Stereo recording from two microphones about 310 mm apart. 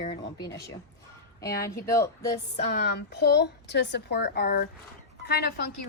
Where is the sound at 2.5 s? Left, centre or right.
Left.